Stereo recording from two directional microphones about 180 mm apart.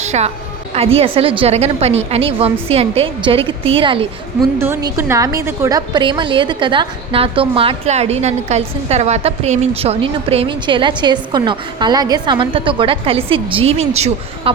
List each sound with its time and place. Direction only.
0.0 s a sound: 40° right (ahead or behind)
0.9 s a woman's voice: 30° right (ahead or behind)
4.5 s a woman's voice: 15° right (ahead or behind); by 14.5 s 35° right (ahead or behind)